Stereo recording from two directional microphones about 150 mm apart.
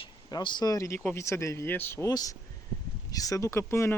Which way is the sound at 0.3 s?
30° left (ahead or behind).